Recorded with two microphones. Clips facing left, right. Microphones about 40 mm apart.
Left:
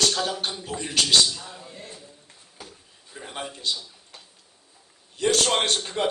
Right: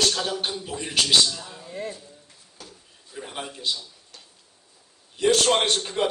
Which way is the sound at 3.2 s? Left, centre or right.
Centre.